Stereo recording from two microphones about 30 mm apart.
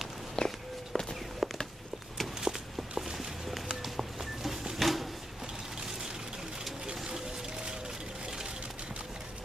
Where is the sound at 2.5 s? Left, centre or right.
Centre.